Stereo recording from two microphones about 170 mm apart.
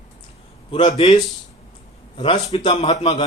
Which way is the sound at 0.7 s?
35° left (ahead or behind).